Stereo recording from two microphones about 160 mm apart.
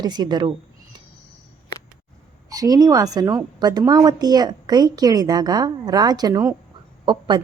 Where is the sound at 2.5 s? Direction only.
20° right (ahead or behind).